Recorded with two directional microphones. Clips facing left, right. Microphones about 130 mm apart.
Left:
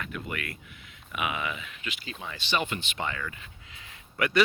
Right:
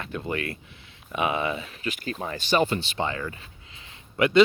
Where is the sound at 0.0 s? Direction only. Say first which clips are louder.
Right 6 dB; 30° right (ahead or behind).